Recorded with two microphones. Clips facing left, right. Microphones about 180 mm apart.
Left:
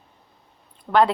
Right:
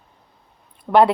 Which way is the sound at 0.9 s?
20° right (ahead or behind).